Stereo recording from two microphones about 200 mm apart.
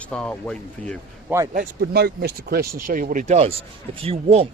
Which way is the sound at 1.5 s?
50° right (ahead or behind).